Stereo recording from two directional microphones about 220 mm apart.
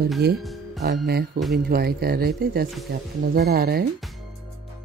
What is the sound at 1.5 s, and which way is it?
Speech, 45° right (ahead or behind).